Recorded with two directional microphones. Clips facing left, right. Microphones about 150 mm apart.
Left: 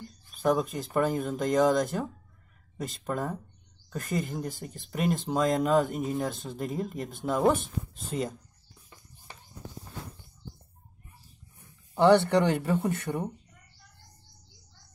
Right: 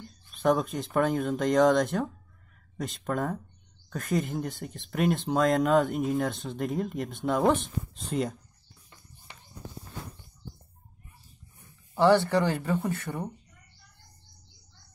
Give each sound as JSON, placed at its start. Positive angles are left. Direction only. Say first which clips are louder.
{"t": 0.3, "sound": "speech", "louder": "right 1 dB", "side_deg": 5}
{"t": 11.9, "sound": "speech", "louder": "left 1 dB", "side_deg": 20}